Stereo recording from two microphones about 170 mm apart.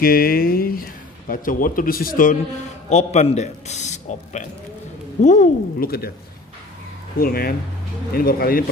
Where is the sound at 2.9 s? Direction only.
40° left (ahead or behind).